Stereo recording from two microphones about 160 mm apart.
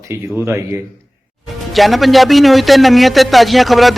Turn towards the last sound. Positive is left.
turn(degrees=0)  # may be behind; listen again after turning